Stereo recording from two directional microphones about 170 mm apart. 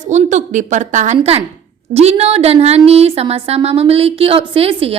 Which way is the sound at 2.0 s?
35° right (ahead or behind).